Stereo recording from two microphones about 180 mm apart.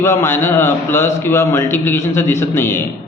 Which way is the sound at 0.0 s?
15° left (ahead or behind).